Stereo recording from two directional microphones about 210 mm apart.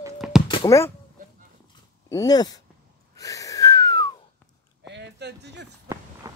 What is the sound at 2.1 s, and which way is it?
Speech, 15° left (ahead or behind).